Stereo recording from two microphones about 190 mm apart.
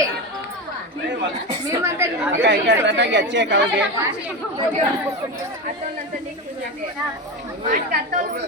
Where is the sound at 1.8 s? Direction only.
15° right (ahead or behind).